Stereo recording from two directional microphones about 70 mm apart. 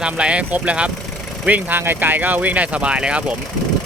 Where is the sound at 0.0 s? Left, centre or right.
Centre.